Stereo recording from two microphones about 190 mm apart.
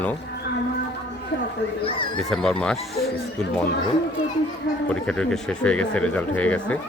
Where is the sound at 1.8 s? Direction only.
30° left (ahead or behind).